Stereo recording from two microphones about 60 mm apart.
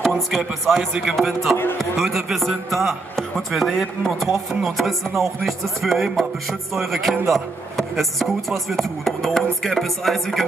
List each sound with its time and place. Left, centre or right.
0.3 s speech: centre